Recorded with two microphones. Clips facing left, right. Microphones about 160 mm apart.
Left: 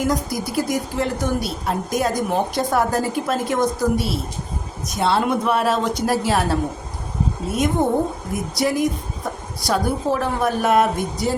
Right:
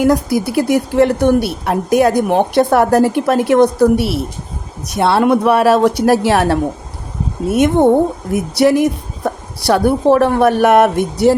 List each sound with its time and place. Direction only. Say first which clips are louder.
0.0 s a woman's voice: right 9 dB; 65° right (ahead or behind)